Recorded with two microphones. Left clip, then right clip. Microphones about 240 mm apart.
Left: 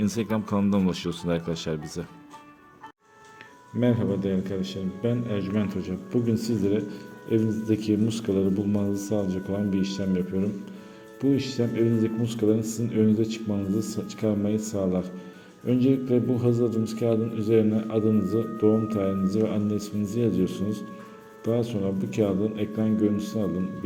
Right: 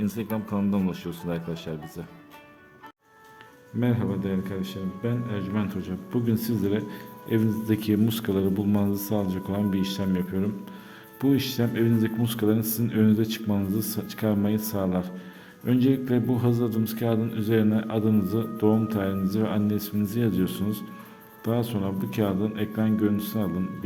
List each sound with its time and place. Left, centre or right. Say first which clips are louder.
0.0 s speech: left 3 dB; centre
3.8 s a man's voice: left 3 dB; centre